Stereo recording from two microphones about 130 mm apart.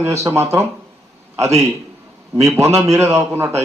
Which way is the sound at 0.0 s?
20° right (ahead or behind).